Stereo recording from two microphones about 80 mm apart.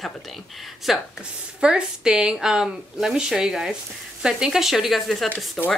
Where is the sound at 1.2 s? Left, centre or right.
Centre.